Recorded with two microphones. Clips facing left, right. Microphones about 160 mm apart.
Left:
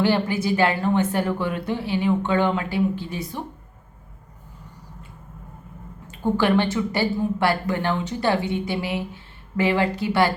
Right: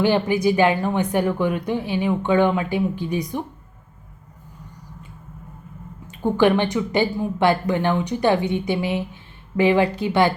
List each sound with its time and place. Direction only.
0.0 s a woman's voice: 15° right (ahead or behind)
6.1 s speech: 20° right (ahead or behind)